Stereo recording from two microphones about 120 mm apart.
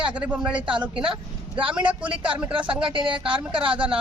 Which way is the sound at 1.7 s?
10° right (ahead or behind).